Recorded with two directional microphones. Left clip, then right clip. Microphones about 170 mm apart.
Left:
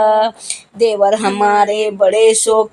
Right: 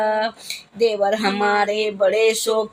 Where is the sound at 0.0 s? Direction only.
30° left (ahead or behind).